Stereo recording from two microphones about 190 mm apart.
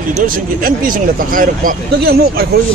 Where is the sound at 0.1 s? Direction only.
45° right (ahead or behind).